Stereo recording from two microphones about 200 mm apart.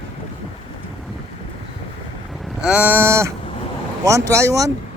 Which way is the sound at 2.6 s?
5° right (ahead or behind).